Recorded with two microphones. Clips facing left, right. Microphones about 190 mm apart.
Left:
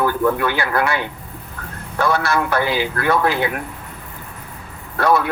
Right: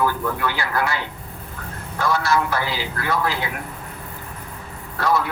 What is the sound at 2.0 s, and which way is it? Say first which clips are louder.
Speech: left 2 dB; 60° left (ahead or behind).